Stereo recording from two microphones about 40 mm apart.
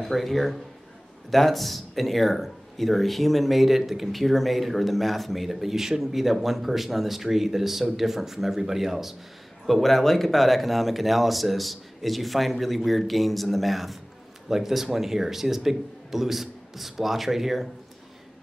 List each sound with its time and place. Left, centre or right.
0.0 s speech: centre
9.7 s a man's voice: centre